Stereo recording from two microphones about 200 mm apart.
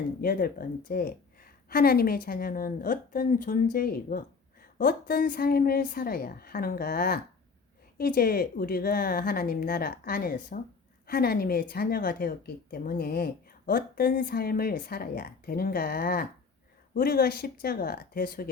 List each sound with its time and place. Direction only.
0.2 s speech: 45° left (ahead or behind)